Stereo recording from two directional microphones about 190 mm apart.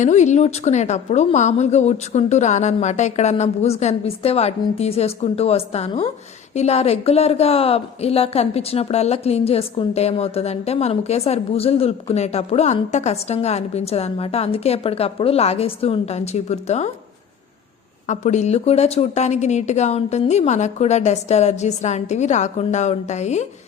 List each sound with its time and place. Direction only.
0.0 s speech: 40° left (ahead or behind)
18.1 s speech: 40° left (ahead or behind)